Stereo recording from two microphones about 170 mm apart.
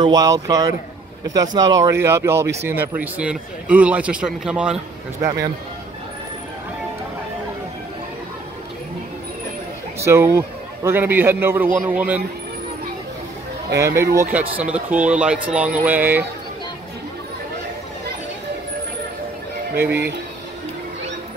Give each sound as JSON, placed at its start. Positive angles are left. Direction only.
{"t": 0.0, "sound": "speech", "side_deg": -20}
{"t": 5.2, "sound": "speech", "side_deg": -20}
{"t": 9.9, "sound": "speech", "side_deg": -15}
{"t": 13.7, "sound": "speech", "side_deg": -15}